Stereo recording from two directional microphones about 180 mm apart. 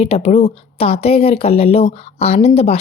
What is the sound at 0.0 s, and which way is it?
Speech, 35° left (ahead or behind).